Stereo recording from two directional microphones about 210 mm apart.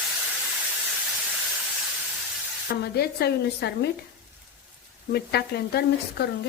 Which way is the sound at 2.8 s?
50° left (ahead or behind).